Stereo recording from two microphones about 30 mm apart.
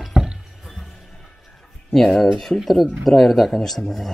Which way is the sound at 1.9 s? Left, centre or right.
Centre.